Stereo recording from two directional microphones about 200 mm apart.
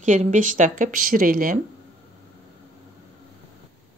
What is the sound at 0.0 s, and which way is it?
Speech, 35° right (ahead or behind).